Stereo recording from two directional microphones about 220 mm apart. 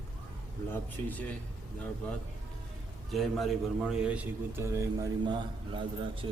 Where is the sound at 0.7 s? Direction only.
5° left (ahead or behind).